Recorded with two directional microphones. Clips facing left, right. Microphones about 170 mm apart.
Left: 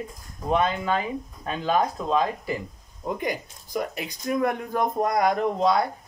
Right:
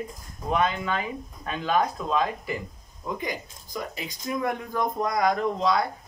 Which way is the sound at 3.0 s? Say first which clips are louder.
Left 3 dB; 45° left (ahead or behind).